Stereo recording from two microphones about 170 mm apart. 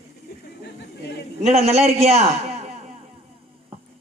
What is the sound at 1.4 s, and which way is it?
Speech, 40° right (ahead or behind).